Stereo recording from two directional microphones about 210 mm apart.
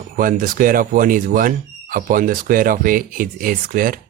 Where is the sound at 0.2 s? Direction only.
40° right (ahead or behind).